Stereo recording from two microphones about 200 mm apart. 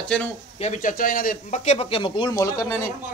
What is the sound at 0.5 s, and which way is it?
Speech, 40° left (ahead or behind).